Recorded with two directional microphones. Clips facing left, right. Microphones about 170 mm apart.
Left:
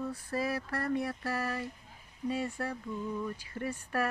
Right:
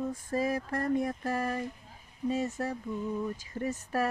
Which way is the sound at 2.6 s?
20° right (ahead or behind).